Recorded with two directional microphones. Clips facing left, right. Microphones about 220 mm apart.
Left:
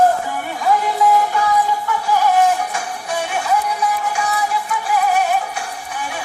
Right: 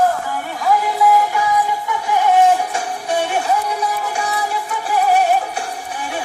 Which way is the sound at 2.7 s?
30° right (ahead or behind).